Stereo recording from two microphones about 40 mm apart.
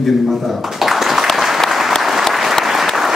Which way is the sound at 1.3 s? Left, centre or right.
Centre.